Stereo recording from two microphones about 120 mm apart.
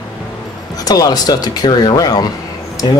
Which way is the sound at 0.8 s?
30° left (ahead or behind).